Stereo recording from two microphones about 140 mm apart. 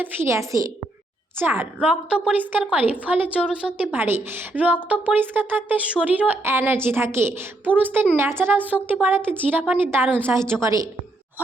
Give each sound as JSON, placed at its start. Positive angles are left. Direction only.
{"t": 0.0, "sound": "a woman's voice", "side_deg": -20}